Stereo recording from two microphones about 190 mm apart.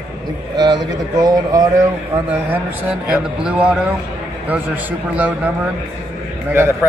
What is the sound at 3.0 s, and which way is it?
A man's voice, 5° right (ahead or behind).